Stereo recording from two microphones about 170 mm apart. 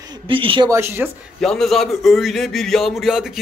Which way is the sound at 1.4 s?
5° left (ahead or behind).